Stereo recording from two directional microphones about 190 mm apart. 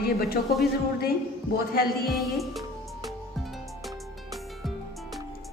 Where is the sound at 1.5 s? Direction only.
50° left (ahead or behind).